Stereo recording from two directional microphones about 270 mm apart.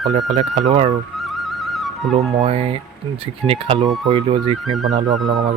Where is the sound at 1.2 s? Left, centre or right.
Centre.